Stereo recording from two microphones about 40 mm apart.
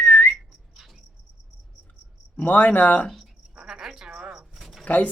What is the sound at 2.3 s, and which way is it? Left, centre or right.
Speech, left.